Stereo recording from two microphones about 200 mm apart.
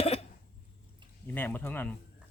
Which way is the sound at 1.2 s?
10° left (ahead or behind).